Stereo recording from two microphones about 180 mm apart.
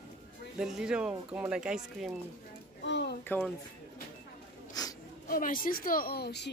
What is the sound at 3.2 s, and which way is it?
Speech, 10° left (ahead or behind).